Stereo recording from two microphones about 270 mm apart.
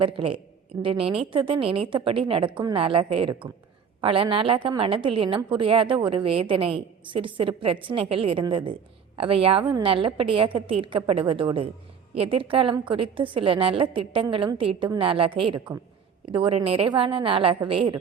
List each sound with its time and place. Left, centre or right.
0.0 s a woman's voice: centre